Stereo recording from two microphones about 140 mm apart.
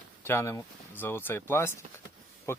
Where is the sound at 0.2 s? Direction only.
15° left (ahead or behind).